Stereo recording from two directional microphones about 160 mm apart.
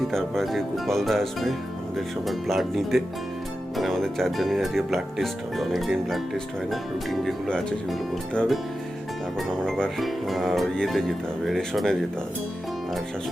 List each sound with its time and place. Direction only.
0.1 s speech: centre (ahead or behind)